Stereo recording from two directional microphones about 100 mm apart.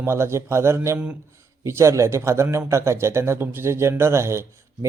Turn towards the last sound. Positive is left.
turn(degrees=-25)  # may be behind; listen again after turning